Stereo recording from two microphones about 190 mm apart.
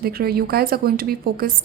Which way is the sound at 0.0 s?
55° right (ahead or behind).